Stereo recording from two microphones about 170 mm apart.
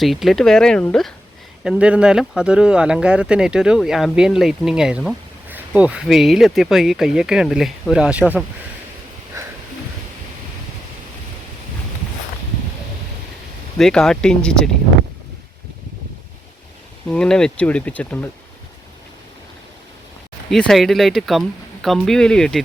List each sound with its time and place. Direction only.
0.0 s speech: centre (ahead or behind)
1.6 s speech: 5° right (ahead or behind)
9.4 s a sound: 20° right (ahead or behind)
13.7 s speech: centre (ahead or behind)
17.1 s speech: 5° left (ahead or behind)
20.5 s speech: centre (ahead or behind)